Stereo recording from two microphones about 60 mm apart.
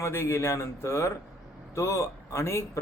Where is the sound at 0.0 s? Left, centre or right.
Left.